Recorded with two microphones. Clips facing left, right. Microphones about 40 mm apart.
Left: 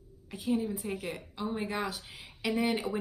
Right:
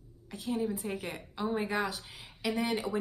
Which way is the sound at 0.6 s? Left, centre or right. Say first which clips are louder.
Right 1 dB; centre.